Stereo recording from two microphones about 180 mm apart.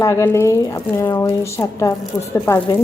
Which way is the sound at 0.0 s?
15° left (ahead or behind).